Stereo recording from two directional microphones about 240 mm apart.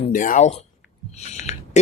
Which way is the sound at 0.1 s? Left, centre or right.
Left.